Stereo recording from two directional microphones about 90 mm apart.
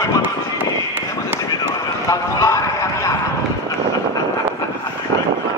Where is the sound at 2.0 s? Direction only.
35° left (ahead or behind).